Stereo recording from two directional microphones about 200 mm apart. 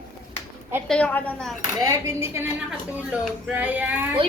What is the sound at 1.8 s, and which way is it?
Speech, 15° right (ahead or behind).